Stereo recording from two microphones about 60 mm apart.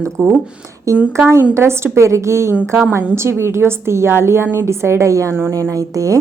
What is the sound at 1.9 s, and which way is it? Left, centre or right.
A woman's voice, right.